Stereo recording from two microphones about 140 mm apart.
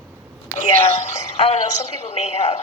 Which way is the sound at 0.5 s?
55° left (ahead or behind).